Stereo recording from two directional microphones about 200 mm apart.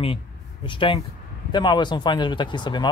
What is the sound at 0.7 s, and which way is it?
Speech, 25° left (ahead or behind).